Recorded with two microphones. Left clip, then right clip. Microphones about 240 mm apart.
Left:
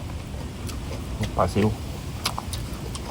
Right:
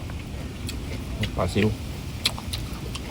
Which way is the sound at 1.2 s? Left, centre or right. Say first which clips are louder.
Left 2 dB; centre.